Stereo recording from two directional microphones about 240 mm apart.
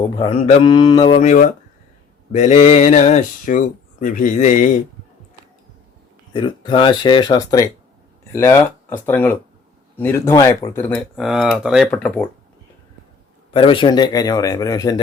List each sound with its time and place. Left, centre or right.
0.2 s speech: left
6.3 s speech: centre
13.5 s speech: left